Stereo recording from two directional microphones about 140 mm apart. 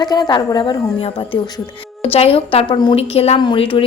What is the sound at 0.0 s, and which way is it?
A woman's voice, 30° left (ahead or behind).